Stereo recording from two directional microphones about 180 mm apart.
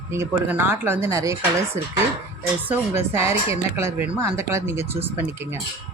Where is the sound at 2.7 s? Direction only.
15° right (ahead or behind).